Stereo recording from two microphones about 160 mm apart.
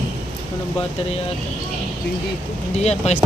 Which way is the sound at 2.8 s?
45° left (ahead or behind).